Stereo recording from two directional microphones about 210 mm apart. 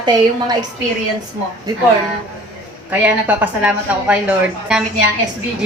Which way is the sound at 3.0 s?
5° right (ahead or behind).